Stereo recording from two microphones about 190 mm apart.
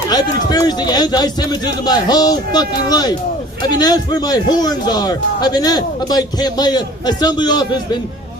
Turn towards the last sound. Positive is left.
turn(degrees=20)  # may be behind; listen again after turning